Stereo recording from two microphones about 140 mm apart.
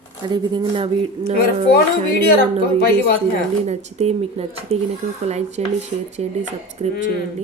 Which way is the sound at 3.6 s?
50° right (ahead or behind).